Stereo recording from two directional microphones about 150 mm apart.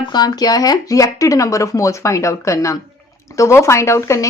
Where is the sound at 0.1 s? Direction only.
25° left (ahead or behind).